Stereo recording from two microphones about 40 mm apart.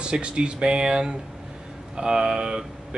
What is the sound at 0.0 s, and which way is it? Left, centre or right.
Speech, right.